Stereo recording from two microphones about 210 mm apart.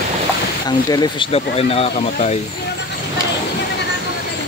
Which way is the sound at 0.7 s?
20° left (ahead or behind).